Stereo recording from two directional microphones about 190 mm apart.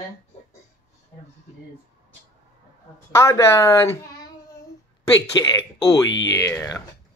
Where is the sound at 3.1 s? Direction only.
15° left (ahead or behind).